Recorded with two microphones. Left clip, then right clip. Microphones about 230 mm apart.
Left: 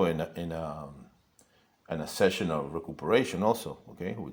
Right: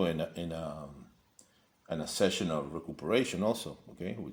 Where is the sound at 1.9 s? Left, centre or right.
Centre.